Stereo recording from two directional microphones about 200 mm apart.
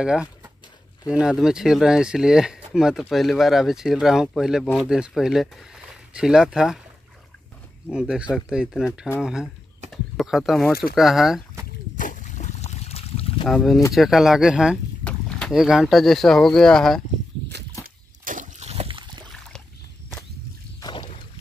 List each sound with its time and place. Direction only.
0.0 s speech: 5° right (ahead or behind)
7.9 s speech: 5° right (ahead or behind)
12.0 s a sound: 40° left (ahead or behind)
13.5 s speech: centre (ahead or behind)
18.2 s slosh: 40° right (ahead or behind); by 19.2 s 25° right (ahead or behind)
20.8 s rowboat: 25° left (ahead or behind)